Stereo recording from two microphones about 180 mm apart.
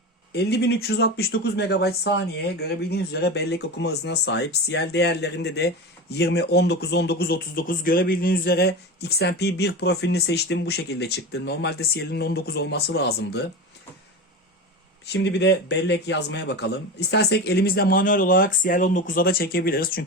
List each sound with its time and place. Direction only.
0.3 s speech: 65° left (ahead or behind)
15.0 s speech: 70° left (ahead or behind); by 20.1 s 55° left (ahead or behind)